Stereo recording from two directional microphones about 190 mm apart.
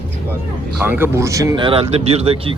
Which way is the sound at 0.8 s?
10° right (ahead or behind).